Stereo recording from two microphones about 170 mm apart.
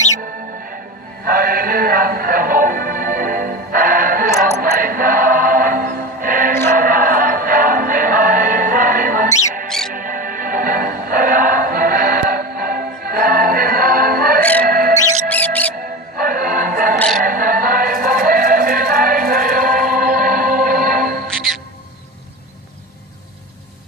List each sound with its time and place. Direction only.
1.2 s music: 60° right (ahead or behind)
6.5 s chant: 15° left (ahead or behind)
6.7 s music: 55° right (ahead or behind)
9.6 s music: 5° left (ahead or behind)
9.9 s music: 55° right (ahead or behind)
15.3 s music: 10° left (ahead or behind)
16.2 s music: 55° right (ahead or behind)
21.2 s music: centre (ahead or behind)